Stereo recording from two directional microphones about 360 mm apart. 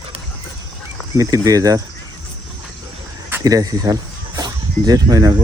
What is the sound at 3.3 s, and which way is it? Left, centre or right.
Speech, centre.